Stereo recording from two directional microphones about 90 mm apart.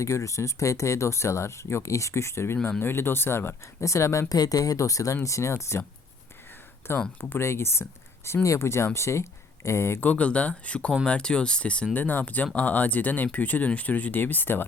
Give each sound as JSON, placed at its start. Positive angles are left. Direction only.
{"t": 0.0, "sound": "speech", "side_deg": 35}
{"t": 6.8, "sound": "speech", "side_deg": 25}
{"t": 10.1, "sound": "speech", "side_deg": 15}